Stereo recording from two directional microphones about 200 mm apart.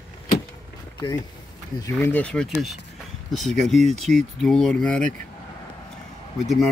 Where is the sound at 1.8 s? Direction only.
10° left (ahead or behind).